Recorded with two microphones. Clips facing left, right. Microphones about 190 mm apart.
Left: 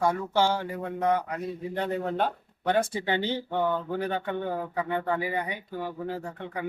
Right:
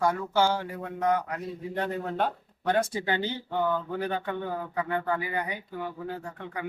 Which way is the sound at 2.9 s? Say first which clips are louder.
Left 2 dB; 25° left (ahead or behind).